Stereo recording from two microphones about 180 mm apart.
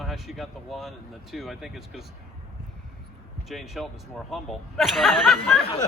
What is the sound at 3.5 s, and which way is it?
Speech, centre (ahead or behind).